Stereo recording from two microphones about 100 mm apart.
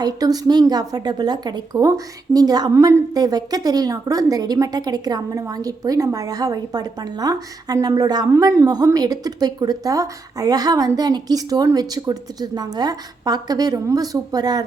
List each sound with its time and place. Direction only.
0.0 s a woman's voice: 40° right (ahead or behind)
2.7 s speech: 25° right (ahead or behind)
3.2 s a woman's voice: 40° right (ahead or behind)